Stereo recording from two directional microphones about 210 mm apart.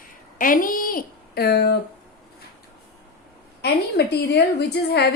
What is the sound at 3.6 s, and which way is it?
A woman's voice, 50° left (ahead or behind).